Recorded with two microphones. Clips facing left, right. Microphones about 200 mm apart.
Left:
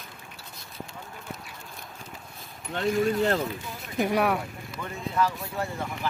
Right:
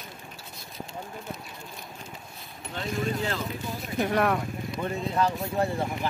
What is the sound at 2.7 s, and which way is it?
Speech, 60° left (ahead or behind).